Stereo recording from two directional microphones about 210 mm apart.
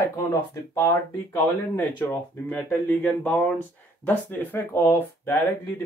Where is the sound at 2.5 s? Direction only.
10° left (ahead or behind).